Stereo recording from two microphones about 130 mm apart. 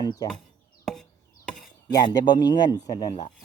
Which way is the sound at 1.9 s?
30° left (ahead or behind).